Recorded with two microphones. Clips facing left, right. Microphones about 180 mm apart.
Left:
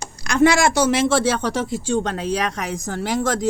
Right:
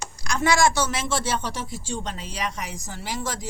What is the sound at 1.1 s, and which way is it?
Speech, 60° left (ahead or behind).